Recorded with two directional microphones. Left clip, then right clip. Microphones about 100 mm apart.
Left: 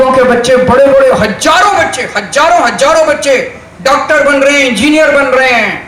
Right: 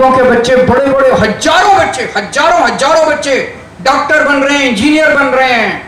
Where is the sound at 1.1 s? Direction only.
20° left (ahead or behind).